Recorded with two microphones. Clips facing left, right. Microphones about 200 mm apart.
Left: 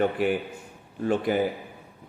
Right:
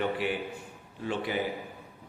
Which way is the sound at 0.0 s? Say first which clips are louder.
Left 6 dB; 45° left (ahead or behind).